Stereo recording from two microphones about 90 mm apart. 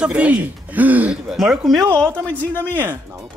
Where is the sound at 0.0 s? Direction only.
15° right (ahead or behind).